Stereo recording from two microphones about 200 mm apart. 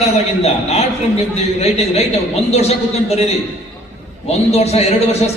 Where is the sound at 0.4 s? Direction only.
30° left (ahead or behind).